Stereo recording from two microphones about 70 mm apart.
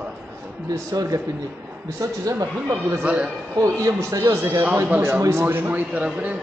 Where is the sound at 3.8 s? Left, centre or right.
Right.